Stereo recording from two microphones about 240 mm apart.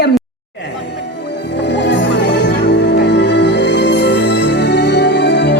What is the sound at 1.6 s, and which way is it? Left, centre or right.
Music, left.